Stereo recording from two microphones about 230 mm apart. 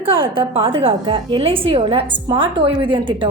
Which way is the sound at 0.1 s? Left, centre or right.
Right.